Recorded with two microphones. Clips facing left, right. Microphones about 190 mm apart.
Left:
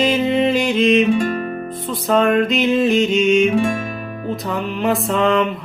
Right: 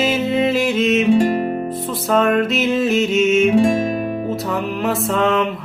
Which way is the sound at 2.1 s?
Centre (ahead or behind).